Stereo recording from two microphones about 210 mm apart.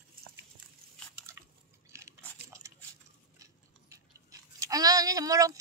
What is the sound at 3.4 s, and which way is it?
Chewing, 15° right (ahead or behind).